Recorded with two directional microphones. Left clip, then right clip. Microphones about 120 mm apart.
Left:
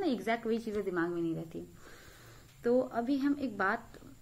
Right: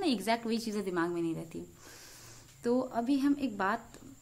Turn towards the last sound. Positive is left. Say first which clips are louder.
# even
turn(degrees=-25)  # may be behind; listen again after turning